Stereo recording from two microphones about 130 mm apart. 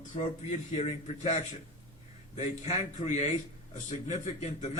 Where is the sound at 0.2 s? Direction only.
60° left (ahead or behind).